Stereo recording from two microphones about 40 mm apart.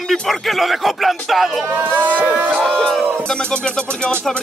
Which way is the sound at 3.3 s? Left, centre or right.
Left.